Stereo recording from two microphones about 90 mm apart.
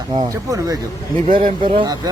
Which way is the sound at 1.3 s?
70° right (ahead or behind).